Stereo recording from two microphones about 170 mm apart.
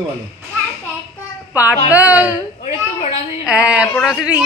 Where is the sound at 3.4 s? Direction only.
5° right (ahead or behind).